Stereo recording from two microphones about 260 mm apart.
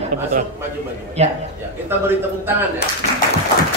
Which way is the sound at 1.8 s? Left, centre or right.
Centre.